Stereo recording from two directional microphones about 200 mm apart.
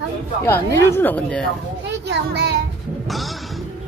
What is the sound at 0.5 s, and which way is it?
A woman's voice, 10° left (ahead or behind).